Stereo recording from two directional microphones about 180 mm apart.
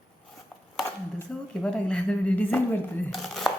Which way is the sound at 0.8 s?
5° left (ahead or behind).